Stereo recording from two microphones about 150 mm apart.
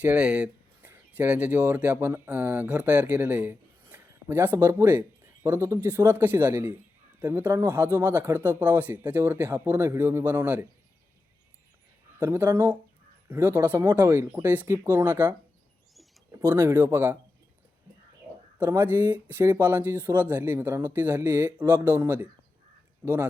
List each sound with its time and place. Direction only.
0.0 s speech: 5° right (ahead or behind)
12.2 s speech: 15° right (ahead or behind)
16.4 s speech: 20° right (ahead or behind)
18.6 s speech: 15° right (ahead or behind)